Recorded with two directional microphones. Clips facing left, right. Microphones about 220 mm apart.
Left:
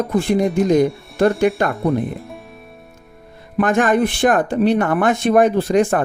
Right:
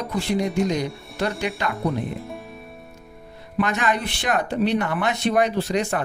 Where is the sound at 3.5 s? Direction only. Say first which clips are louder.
Left 7 dB; 50° left (ahead or behind).